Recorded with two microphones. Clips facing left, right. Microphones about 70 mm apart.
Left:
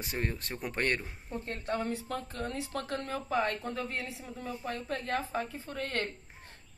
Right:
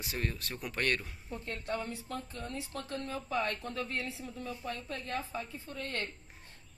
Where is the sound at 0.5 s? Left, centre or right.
Left.